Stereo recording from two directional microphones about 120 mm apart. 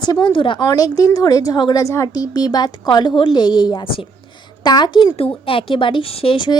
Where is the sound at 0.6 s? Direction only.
30° left (ahead or behind).